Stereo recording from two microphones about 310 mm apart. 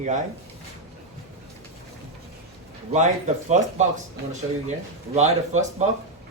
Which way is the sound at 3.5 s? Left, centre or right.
Right.